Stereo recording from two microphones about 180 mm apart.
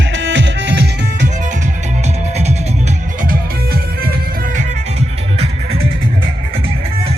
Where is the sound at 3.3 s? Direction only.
55° right (ahead or behind).